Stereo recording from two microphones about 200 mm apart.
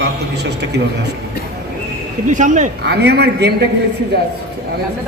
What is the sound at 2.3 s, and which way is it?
Speech, 40° right (ahead or behind).